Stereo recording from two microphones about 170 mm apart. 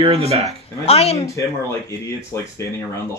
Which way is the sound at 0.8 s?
35° left (ahead or behind).